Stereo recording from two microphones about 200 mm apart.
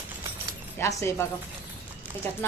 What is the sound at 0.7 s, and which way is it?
Speech, 15° left (ahead or behind).